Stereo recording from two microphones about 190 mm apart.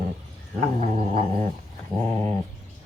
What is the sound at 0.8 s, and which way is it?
Cat, 35° right (ahead or behind).